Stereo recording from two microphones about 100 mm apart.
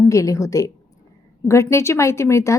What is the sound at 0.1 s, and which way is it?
A woman's voice, 35° left (ahead or behind).